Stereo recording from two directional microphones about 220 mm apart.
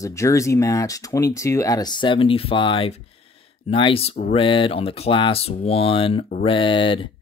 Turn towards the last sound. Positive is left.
turn(degrees=20)  # may be behind; listen again after turning